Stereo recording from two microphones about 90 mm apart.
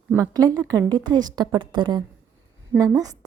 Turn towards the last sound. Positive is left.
turn(degrees=-45)  # may be behind; listen again after turning